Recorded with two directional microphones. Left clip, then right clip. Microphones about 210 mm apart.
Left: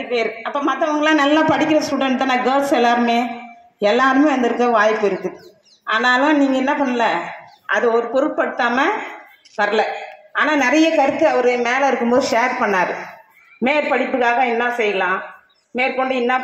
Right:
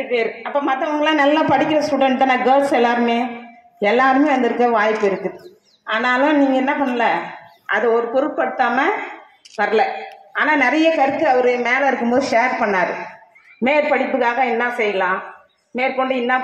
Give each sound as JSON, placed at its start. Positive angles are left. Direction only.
{"t": 0.1, "sound": "a woman's voice", "side_deg": 20}